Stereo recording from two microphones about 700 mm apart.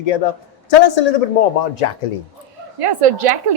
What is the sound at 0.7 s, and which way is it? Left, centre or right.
Speech, left.